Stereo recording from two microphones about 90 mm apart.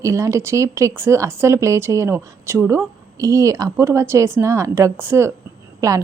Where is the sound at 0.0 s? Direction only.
35° right (ahead or behind).